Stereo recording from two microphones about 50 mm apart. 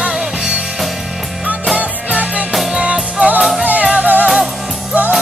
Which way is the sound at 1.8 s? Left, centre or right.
Right.